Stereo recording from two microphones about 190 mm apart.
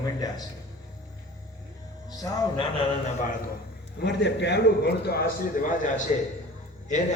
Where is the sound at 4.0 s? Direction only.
65° left (ahead or behind); by 6.1 s 45° left (ahead or behind).